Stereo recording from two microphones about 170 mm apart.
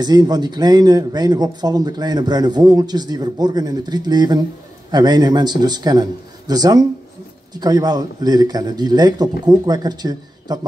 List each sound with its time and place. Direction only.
0.0 s a man's voice: 25° right (ahead or behind)